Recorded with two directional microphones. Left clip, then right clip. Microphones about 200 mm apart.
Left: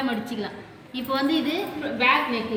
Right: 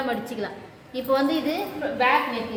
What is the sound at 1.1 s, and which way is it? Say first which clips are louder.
Speech: right 2 dB; 55° right (ahead or behind).